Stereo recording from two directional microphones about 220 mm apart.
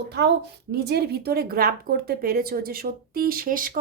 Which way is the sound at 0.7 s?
45° right (ahead or behind).